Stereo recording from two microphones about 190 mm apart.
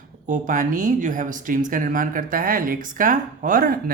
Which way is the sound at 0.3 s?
45° right (ahead or behind).